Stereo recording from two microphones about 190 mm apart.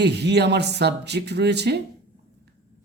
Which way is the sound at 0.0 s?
60° right (ahead or behind).